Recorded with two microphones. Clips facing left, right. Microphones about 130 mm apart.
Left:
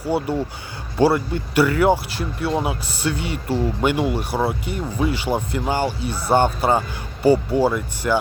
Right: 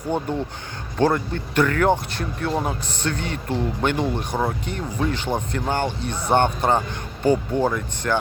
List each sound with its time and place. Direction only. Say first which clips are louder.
0.0 s speech: left 3 dB; 5° left (ahead or behind)